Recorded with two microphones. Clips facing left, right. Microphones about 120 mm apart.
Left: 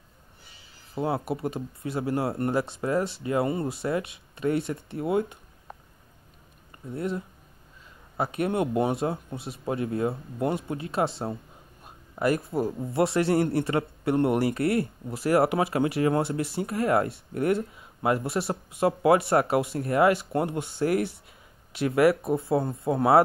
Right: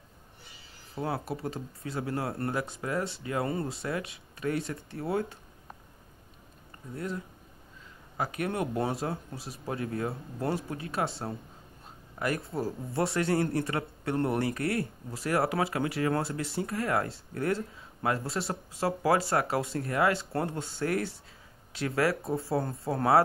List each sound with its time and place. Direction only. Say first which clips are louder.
0.9 s a man's voice: left 5 dB; 25° left (ahead or behind)
6.9 s a man's voice: left 5 dB; 25° left (ahead or behind)
8.2 s a man's voice: left 5 dB; 25° left (ahead or behind)
11.8 s a sound: left 7 dB; 25° left (ahead or behind)
12.5 s a man's voice: left 5 dB; 25° left (ahead or behind)